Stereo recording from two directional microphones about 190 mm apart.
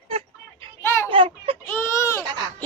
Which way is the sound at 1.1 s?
30° right (ahead or behind).